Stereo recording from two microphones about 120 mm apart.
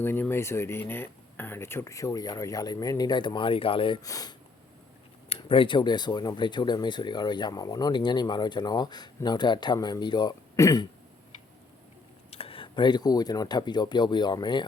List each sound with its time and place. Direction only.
0.0 s speech: 20° left (ahead or behind); by 4.0 s 45° left (ahead or behind)
4.0 s speech: 30° left (ahead or behind)
5.5 s speech: 45° left (ahead or behind)
12.3 s speech: 50° left (ahead or behind)